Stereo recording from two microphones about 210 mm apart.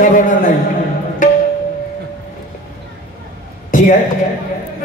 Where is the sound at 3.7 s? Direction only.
40° left (ahead or behind).